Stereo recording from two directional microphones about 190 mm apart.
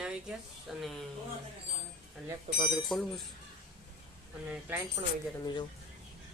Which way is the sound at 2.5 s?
35° right (ahead or behind).